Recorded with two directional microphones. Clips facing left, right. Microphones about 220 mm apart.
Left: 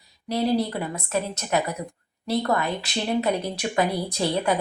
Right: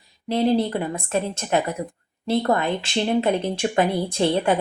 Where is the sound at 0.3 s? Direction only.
25° right (ahead or behind).